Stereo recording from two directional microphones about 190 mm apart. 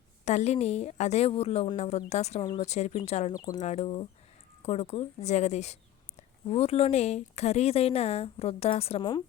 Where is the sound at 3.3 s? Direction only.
20° left (ahead or behind).